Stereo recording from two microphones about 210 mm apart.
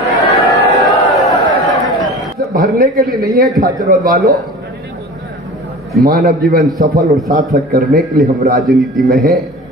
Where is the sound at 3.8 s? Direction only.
45° right (ahead or behind).